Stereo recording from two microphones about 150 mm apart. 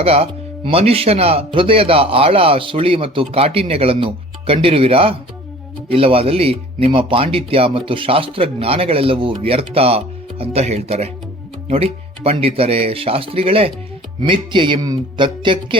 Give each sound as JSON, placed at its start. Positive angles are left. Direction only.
{"t": 0.0, "sound": "speech", "side_deg": -40}